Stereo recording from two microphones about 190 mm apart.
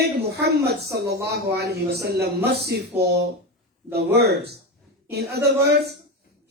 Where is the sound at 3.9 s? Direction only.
60° right (ahead or behind).